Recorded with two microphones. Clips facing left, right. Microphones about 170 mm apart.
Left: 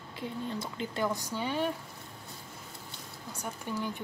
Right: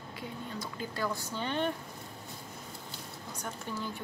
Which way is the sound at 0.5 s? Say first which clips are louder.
Left 3 dB; 20° left (ahead or behind).